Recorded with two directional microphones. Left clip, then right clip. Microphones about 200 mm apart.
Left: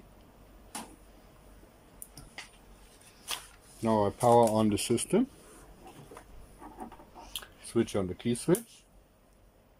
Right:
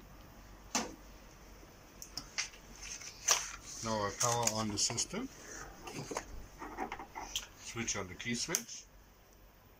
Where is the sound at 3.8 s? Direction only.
55° left (ahead or behind).